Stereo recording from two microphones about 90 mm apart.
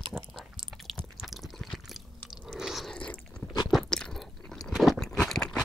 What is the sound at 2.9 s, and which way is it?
Biting, 10° left (ahead or behind).